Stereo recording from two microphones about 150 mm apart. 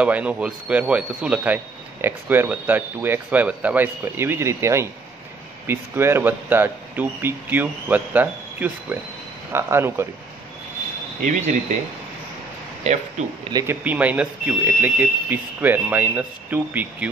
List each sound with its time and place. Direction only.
0.0 s speech: 10° right (ahead or behind)
11.2 s speech: 50° right (ahead or behind)
12.8 s speech: 50° right (ahead or behind)
13.7 s speech: 10° right (ahead or behind)